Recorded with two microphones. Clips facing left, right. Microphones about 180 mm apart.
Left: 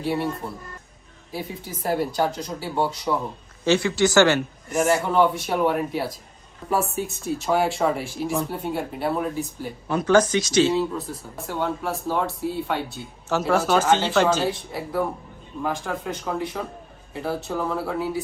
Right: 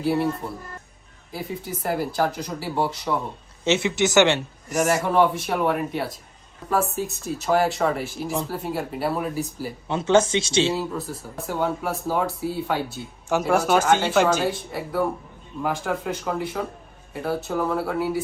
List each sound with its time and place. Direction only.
0.0 s speech: centre (ahead or behind)
1.4 s speech: centre (ahead or behind)
3.6 s speech: 20° right (ahead or behind)
4.7 s speech: centre (ahead or behind)
9.9 s speech: 25° right (ahead or behind)
10.8 s a woman's voice: centre (ahead or behind)